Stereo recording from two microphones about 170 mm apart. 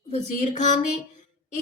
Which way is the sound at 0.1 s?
40° left (ahead or behind).